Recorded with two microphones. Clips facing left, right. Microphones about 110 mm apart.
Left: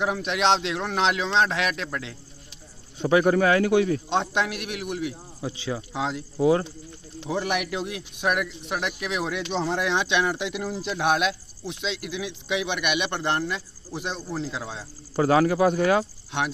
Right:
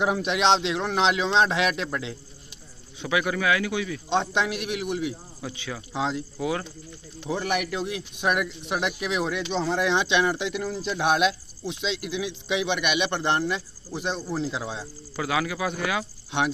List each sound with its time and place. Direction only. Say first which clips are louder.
0.0 s speech: right 1 dB; 5° right (ahead or behind)
3.0 s a man's voice: left 7 dB; 40° left (ahead or behind)
4.1 s speech: even; 5° left (ahead or behind)
5.4 s speech: left 6 dB; 30° left (ahead or behind)
5.9 s speech: right 3 dB; 5° left (ahead or behind)
6.3 s speech: left 7 dB; 30° left (ahead or behind)
7.2 s speech: even; 5° left (ahead or behind)
15.1 s speech: left 8 dB; 40° left (ahead or behind)